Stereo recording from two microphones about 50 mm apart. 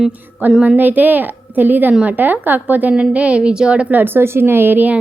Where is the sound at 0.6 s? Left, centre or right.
Right.